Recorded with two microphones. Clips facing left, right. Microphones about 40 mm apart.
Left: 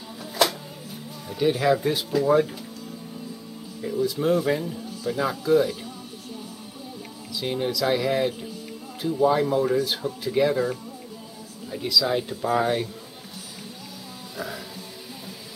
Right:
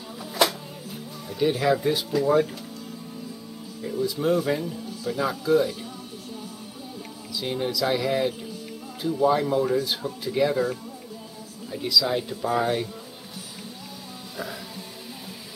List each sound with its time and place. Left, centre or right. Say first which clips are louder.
1.3 s speech: left 1 dB; centre
3.8 s speech: left 1 dB; centre
7.3 s speech: left 1 dB; centre
14.3 s music: left 1 dB; centre